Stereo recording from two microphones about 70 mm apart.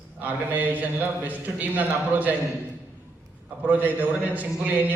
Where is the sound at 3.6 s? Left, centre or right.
Right.